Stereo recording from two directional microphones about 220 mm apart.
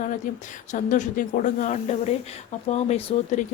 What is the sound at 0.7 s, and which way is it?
Speech, 35° left (ahead or behind).